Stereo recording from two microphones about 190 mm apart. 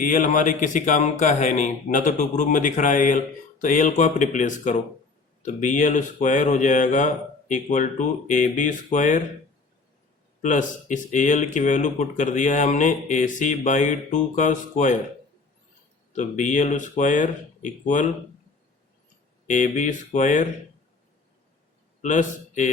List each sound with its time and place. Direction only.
0.0 s speech: 45° left (ahead or behind)
10.4 s speech: 40° left (ahead or behind)
16.1 s speech: 40° left (ahead or behind)
19.5 s speech: 40° left (ahead or behind)
22.0 s a man's voice: 40° left (ahead or behind)